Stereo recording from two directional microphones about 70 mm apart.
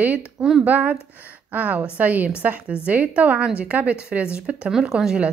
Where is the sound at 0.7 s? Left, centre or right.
Right.